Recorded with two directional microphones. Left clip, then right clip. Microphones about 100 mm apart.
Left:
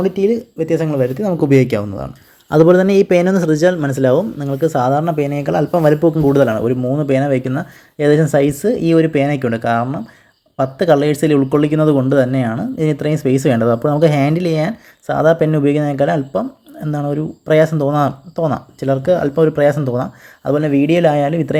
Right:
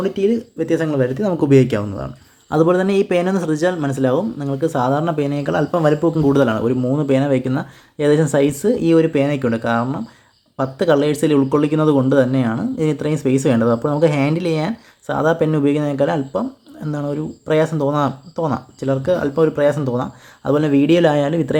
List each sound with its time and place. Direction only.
0.0 s speech: 25° left (ahead or behind)
0.6 s speech: 15° left (ahead or behind)
2.5 s speech: 40° left (ahead or behind); by 5.8 s 20° left (ahead or behind)
5.8 s speech: 35° left (ahead or behind)
6.1 s speech: 20° left (ahead or behind)
20.4 s speech: centre (ahead or behind)